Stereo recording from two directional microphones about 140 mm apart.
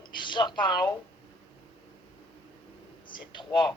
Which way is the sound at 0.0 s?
35° left (ahead or behind).